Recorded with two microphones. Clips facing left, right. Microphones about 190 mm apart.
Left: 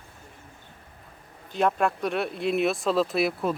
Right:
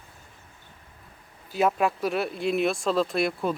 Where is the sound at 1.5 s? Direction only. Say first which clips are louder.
Even; 5° right (ahead or behind).